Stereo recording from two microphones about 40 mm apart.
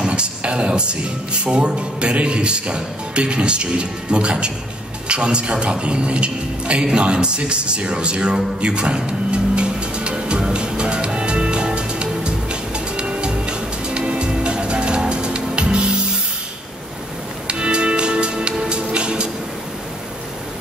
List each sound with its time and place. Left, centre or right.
0.0 s speech: right
8.5 s music: right
17.5 s music: right